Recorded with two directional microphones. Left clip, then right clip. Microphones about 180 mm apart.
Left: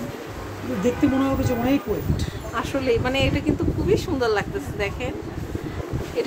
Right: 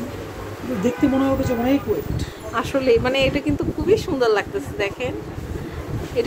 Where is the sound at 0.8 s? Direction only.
15° left (ahead or behind).